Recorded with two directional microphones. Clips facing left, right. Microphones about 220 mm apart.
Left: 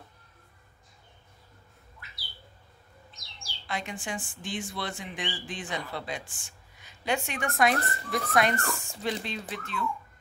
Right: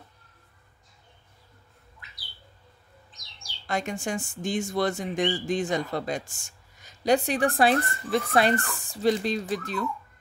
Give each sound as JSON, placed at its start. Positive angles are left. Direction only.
{"t": 3.6, "sound": "speech", "side_deg": -45}